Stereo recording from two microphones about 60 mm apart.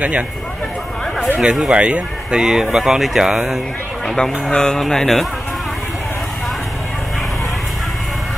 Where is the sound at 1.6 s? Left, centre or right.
Centre.